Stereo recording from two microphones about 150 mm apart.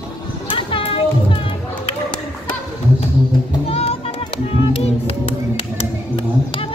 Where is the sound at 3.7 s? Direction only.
40° left (ahead or behind).